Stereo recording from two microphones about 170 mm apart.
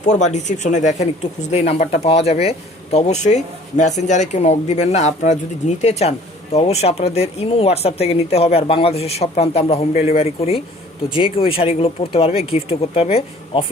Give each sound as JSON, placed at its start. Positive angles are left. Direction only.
{"t": 0.0, "sound": "speech", "side_deg": 45}